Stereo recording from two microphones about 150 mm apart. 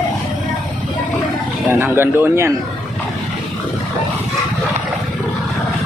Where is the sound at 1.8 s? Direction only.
15° right (ahead or behind).